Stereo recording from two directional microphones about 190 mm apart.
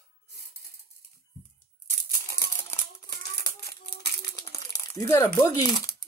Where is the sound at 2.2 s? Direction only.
15° left (ahead or behind).